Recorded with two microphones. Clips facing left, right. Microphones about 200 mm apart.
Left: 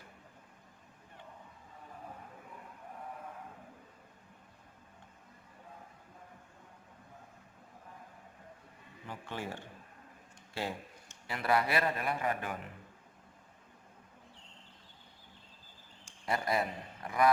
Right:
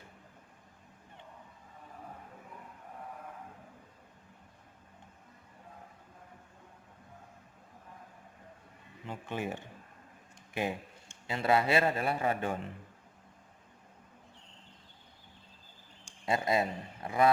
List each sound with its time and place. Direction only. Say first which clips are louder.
9.0 s a man's voice: right 4 dB; 20° right (ahead or behind)
16.2 s a man's voice: right 3 dB; 25° right (ahead or behind)